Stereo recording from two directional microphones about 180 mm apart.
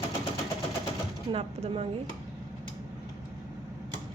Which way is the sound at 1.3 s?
35° right (ahead or behind).